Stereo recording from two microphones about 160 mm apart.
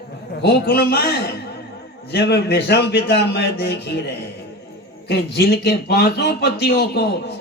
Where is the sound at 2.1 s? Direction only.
90° left.